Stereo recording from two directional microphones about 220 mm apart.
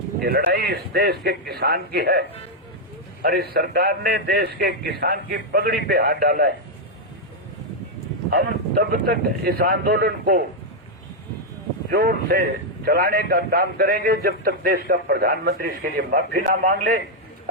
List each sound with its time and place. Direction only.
0.2 s a man's voice: 40° right (ahead or behind)
8.3 s a man's voice: 40° right (ahead or behind)
11.9 s a man's voice: 45° right (ahead or behind)